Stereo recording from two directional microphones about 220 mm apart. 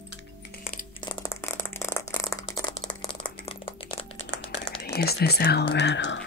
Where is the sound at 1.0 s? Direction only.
10° left (ahead or behind).